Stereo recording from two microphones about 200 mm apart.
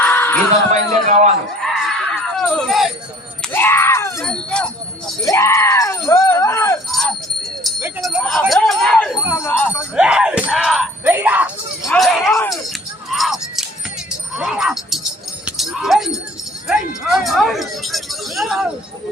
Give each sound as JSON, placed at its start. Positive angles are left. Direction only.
{"t": 0.0, "sound": "a sound", "side_deg": 10}
{"t": 0.7, "sound": "speech", "side_deg": -35}
{"t": 1.6, "sound": "screaming", "side_deg": 0}
{"t": 3.4, "sound": "speech", "side_deg": 10}
{"t": 5.2, "sound": "speech", "side_deg": 15}
{"t": 6.9, "sound": "jingle bell", "side_deg": 0}
{"t": 7.8, "sound": "speech", "side_deg": -10}
{"t": 9.9, "sound": "speech", "side_deg": -5}
{"t": 13.1, "sound": "a sound", "side_deg": 0}
{"t": 14.3, "sound": "speech", "side_deg": -5}